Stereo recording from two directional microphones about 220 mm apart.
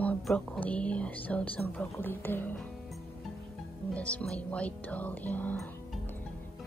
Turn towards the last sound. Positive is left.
turn(degrees=10)  # may be behind; listen again after turning